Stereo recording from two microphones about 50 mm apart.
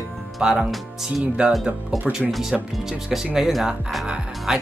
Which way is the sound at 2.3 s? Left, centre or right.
Centre.